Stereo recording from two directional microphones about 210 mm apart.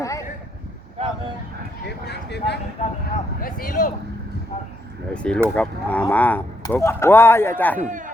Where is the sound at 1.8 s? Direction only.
55° left (ahead or behind).